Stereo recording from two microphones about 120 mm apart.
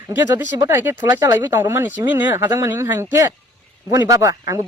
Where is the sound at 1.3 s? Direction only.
20° right (ahead or behind).